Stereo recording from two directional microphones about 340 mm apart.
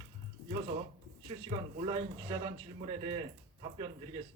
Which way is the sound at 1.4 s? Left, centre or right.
Centre.